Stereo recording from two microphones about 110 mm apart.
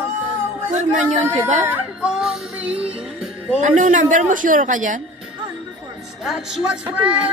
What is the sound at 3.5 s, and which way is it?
Speech, 90° right.